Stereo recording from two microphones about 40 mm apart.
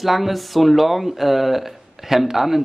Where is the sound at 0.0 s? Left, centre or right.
Centre.